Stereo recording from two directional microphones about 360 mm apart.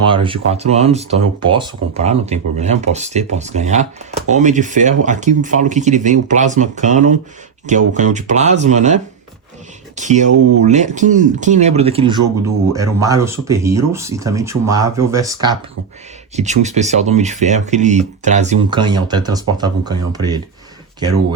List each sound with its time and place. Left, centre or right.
0.1 s speech: centre
10.0 s speech: centre